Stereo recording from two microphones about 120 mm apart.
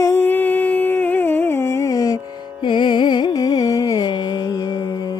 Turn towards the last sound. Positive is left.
turn(degrees=35)  # may be behind; listen again after turning